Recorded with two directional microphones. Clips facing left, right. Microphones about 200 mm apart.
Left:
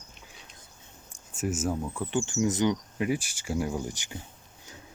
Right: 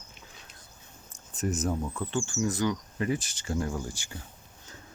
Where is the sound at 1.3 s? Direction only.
10° left (ahead or behind).